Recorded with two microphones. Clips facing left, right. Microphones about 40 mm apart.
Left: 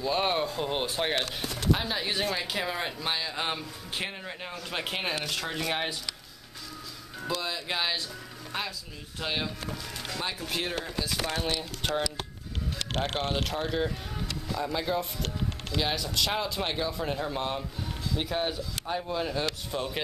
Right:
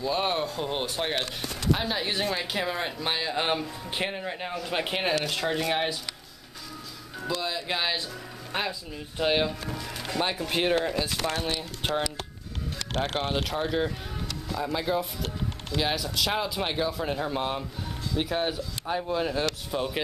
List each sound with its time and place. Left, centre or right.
0.0 s speech: centre
3.1 s speech: centre
7.2 s speech: centre
8.5 s speech: right
11.3 s speech: centre
13.2 s speech: centre